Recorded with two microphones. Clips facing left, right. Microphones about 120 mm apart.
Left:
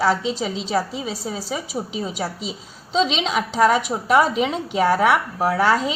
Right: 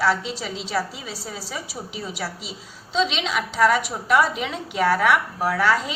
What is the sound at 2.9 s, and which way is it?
A woman's voice, 40° left (ahead or behind).